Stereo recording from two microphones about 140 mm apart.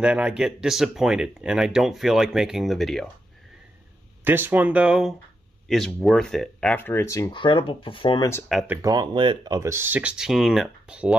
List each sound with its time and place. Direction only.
0.0 s speech: 5° right (ahead or behind)
4.2 s speech: 15° right (ahead or behind); by 7.3 s 20° left (ahead or behind)
7.3 s speech: 35° left (ahead or behind)
8.5 s speech: centre (ahead or behind)
8.8 s speech: 30° right (ahead or behind); by 11.1 s 10° right (ahead or behind)